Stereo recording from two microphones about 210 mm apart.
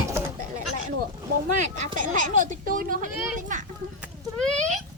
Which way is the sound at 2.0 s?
40° right (ahead or behind).